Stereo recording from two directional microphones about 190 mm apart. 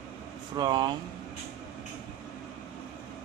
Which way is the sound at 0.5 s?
20° right (ahead or behind).